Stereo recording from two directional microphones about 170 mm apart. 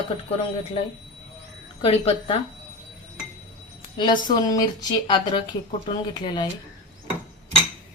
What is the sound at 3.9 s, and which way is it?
Speech, 25° left (ahead or behind).